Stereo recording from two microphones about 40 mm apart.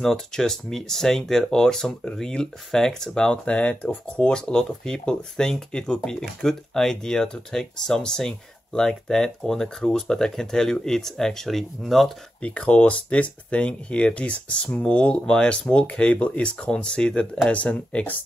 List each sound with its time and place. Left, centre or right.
0.0 s speech: centre
12.4 s speech: left